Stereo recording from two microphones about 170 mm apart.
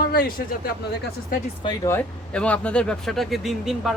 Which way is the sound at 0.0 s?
60° left (ahead or behind).